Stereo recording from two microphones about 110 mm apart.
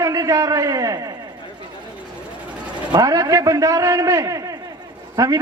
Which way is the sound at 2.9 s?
35° right (ahead or behind).